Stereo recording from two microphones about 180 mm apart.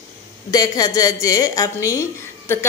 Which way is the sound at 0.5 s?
20° left (ahead or behind).